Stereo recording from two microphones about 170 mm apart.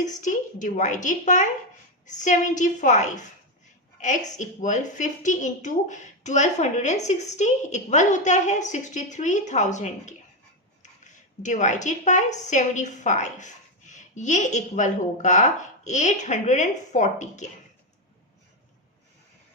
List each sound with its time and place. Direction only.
0.2 s a woman's voice: 50° left (ahead or behind)
11.4 s a woman's voice: 45° left (ahead or behind)